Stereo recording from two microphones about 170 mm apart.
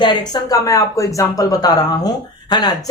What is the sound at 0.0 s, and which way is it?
Speech, 25° left (ahead or behind).